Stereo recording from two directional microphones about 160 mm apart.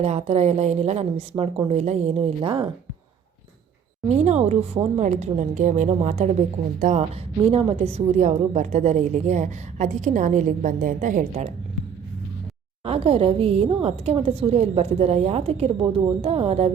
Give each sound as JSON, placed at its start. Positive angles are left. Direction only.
{"t": 0.0, "sound": "a woman's voice", "side_deg": -40}
{"t": 4.2, "sound": "a woman's voice", "side_deg": -45}
{"t": 7.5, "sound": "a woman's voice", "side_deg": -40}
{"t": 12.8, "sound": "a woman's voice", "side_deg": -35}